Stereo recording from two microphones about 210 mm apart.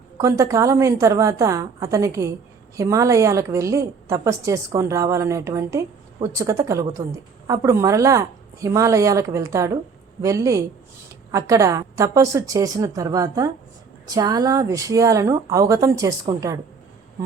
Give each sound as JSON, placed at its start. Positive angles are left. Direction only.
{"t": 0.2, "sound": "a woman's voice", "side_deg": -15}